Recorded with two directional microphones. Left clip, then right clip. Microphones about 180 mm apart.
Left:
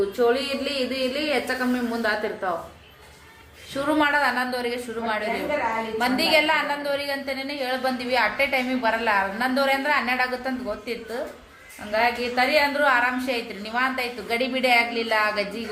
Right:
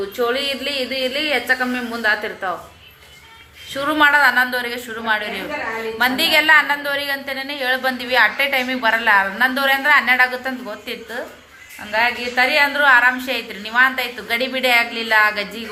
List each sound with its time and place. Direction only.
0.2 s a man's voice: 10° left (ahead or behind)
3.8 s a man's voice: 10° left (ahead or behind)